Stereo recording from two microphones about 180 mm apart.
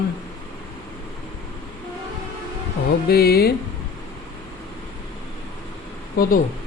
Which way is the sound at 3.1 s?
60° left (ahead or behind).